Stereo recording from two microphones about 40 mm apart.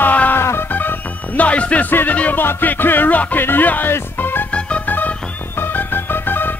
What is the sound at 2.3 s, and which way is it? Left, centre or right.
Music, left.